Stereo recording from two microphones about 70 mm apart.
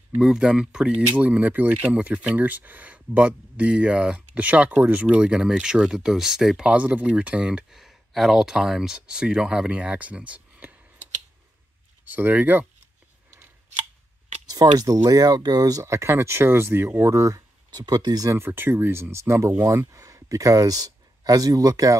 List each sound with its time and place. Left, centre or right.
0.2 s speech: centre
1.1 s speech: right; by 6.7 s centre
6.7 s speech: right
12.0 s speech: right
14.5 s speech: right
17.7 s speech: right
18.3 s speech: right
19.9 s speech: right